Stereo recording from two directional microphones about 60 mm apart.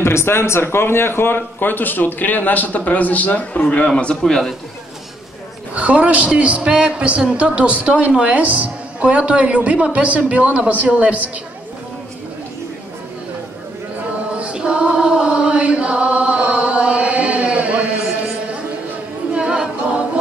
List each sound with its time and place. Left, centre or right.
0.0 s a man's voice: left
3.9 s a man's voice: centre
5.8 s a man's voice: right
14.3 s chant: centre
19.3 s a capella: centre